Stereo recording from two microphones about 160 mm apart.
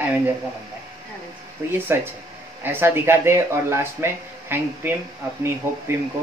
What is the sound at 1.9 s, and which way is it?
Speech, 15° right (ahead or behind).